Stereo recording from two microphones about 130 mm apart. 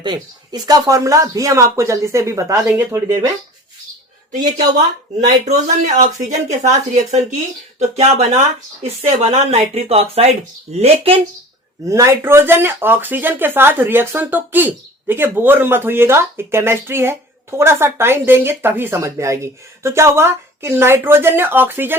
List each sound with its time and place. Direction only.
0.0 s speech: 35° right (ahead or behind); by 3.0 s 15° right (ahead or behind)
5.2 s speech: 65° right (ahead or behind); by 11.2 s 50° right (ahead or behind)
11.9 s speech: 25° right (ahead or behind)